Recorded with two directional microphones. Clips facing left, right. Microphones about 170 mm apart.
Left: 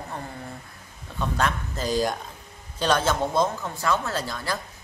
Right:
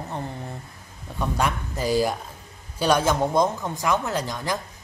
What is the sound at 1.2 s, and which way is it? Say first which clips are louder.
A man's voice: right 1 dB; 10° right (ahead or behind).